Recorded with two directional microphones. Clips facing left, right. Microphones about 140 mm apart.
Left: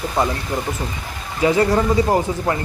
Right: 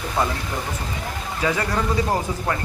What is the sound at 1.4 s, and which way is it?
Speech, 25° left (ahead or behind).